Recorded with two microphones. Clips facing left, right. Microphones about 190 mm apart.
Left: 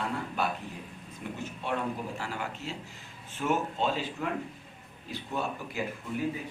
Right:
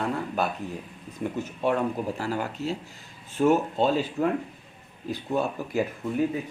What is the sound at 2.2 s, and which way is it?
Speech, 40° right (ahead or behind).